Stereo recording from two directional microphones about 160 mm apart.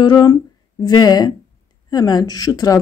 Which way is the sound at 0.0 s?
25° left (ahead or behind).